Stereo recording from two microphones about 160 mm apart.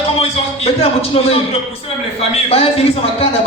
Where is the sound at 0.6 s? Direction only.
35° left (ahead or behind).